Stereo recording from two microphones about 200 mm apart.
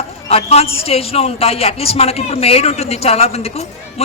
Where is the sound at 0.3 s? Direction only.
30° left (ahead or behind).